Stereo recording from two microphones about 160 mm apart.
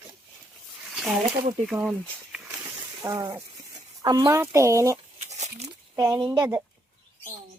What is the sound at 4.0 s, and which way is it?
Speech, 25° right (ahead or behind).